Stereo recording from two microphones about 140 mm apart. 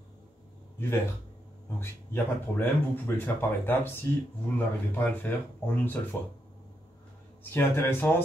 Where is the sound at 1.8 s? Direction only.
15° left (ahead or behind).